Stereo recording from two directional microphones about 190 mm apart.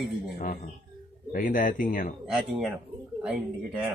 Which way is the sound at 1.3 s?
45° left (ahead or behind).